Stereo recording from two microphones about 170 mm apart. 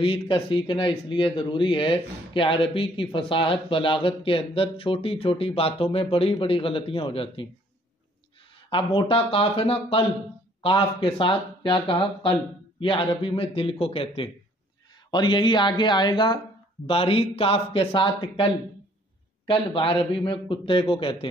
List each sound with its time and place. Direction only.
0.0 s speech: 30° left (ahead or behind)
8.6 s speech: 30° left (ahead or behind)